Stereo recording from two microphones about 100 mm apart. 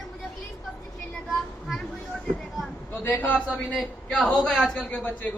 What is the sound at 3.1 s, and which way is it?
Speech, 15° left (ahead or behind).